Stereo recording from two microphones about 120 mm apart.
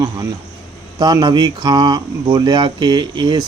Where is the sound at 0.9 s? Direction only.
35° right (ahead or behind).